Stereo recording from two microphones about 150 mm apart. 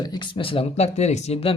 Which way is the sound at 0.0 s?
30° left (ahead or behind).